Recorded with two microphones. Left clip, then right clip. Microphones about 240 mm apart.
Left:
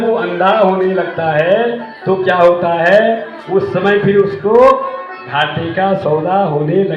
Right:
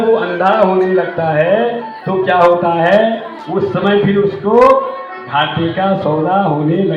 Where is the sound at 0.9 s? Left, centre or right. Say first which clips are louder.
Right 1 dB; left.